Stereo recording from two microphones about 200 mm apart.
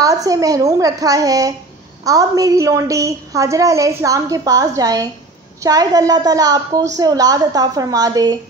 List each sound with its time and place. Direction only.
0.0 s a woman's voice: 15° right (ahead or behind)